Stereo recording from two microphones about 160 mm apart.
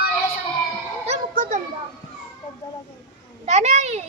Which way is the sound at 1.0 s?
45° right (ahead or behind).